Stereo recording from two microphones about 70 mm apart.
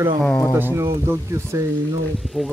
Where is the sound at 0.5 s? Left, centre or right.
Right.